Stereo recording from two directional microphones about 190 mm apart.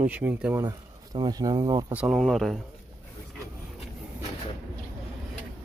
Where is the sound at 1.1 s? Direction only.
20° right (ahead or behind).